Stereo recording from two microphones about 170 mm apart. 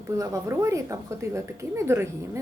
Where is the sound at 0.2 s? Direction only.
20° right (ahead or behind).